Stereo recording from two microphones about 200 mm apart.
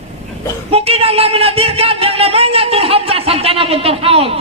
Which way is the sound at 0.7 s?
30° right (ahead or behind).